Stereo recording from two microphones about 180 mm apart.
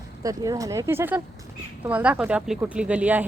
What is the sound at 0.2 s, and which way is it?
A child's voice, 20° right (ahead or behind).